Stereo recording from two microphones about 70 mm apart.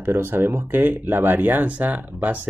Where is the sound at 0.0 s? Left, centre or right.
Right.